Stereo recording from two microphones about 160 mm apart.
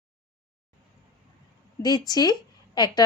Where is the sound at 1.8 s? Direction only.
25° left (ahead or behind).